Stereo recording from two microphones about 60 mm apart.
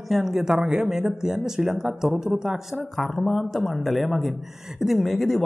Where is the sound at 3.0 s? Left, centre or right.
Centre.